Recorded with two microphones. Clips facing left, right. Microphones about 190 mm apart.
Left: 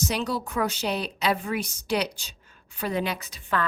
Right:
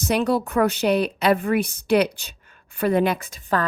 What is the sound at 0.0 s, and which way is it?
A woman's voice, 55° right (ahead or behind).